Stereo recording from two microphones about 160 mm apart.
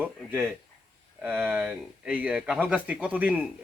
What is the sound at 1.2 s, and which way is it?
Speech, 10° right (ahead or behind).